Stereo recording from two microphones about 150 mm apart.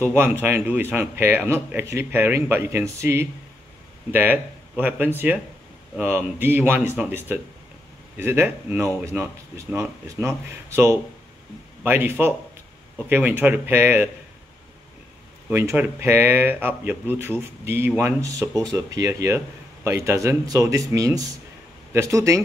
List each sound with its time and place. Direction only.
0.0 s speech: 15° right (ahead or behind)
15.5 s speech: 15° right (ahead or behind)